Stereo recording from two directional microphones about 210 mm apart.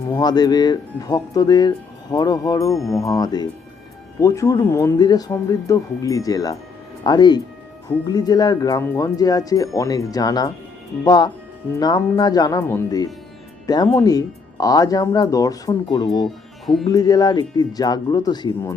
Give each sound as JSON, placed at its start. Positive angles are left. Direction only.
{"t": 0.1, "sound": "speech", "side_deg": 20}
{"t": 16.2, "sound": "music", "side_deg": 0}
{"t": 16.9, "sound": "speech", "side_deg": 20}